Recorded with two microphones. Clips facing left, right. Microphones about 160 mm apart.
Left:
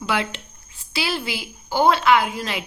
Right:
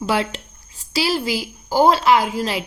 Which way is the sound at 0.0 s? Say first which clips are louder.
Right 3 dB; 40° right (ahead or behind).